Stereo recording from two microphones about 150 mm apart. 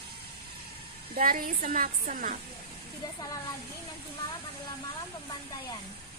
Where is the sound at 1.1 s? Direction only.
75° right (ahead or behind).